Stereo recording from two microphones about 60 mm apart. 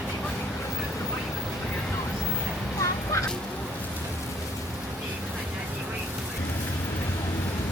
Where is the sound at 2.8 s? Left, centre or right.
Left.